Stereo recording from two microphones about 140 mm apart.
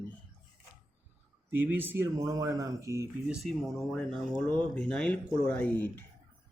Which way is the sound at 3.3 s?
Centre (ahead or behind).